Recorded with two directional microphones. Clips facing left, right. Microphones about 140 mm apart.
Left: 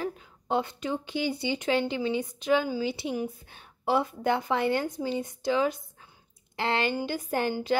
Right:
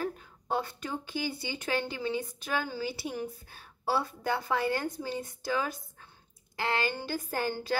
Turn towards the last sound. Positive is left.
turn(degrees=20)  # may be behind; listen again after turning